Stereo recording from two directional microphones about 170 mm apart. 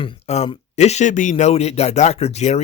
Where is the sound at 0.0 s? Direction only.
35° left (ahead or behind).